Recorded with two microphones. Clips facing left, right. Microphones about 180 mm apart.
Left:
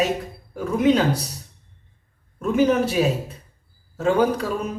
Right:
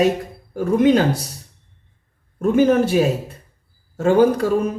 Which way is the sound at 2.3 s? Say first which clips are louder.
Right 4 dB; 50° right (ahead or behind).